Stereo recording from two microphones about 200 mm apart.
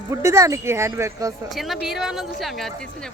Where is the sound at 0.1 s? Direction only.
15° right (ahead or behind).